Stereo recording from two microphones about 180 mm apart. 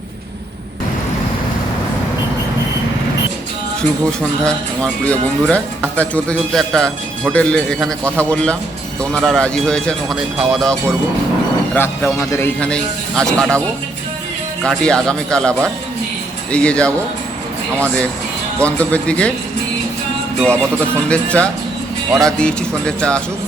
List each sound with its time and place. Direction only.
4.0 s a man's voice: 5° left (ahead or behind)
14.6 s a man's voice: 5° left (ahead or behind)
18.6 s speech: 5° left (ahead or behind)
21.1 s a man's voice: 5° left (ahead or behind)